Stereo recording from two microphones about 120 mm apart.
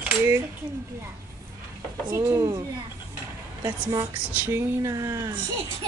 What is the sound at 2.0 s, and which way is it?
Speech, 25° right (ahead or behind).